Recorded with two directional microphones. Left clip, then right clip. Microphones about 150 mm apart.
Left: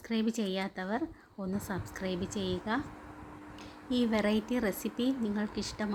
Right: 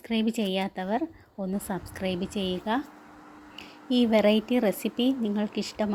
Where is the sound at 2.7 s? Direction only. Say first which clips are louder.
Right 6 dB; 25° right (ahead or behind).